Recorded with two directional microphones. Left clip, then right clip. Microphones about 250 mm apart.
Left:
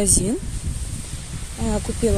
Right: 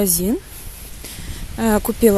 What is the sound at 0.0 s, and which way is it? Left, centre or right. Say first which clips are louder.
Speech: right 1 dB; centre.